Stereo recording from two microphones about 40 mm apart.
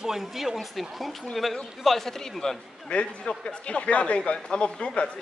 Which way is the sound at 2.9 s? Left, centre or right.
Left.